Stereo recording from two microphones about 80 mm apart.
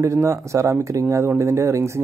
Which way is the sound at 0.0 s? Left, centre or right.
Right.